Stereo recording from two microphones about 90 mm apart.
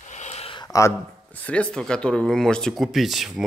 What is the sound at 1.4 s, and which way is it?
Speech, 15° left (ahead or behind).